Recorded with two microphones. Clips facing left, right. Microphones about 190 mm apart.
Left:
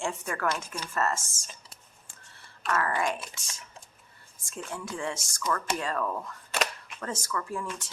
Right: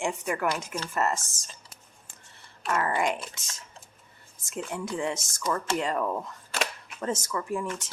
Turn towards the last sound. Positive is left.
turn(degrees=-20)  # may be behind; listen again after turning